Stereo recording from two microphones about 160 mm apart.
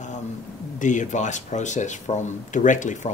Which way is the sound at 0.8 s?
50° left (ahead or behind).